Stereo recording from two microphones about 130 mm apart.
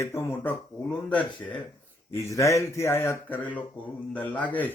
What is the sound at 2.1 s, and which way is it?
Speech, 20° left (ahead or behind).